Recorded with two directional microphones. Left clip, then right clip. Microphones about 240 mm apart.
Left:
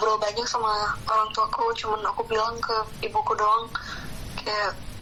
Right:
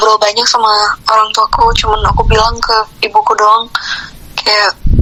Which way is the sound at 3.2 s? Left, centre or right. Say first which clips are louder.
Right 12 dB; right.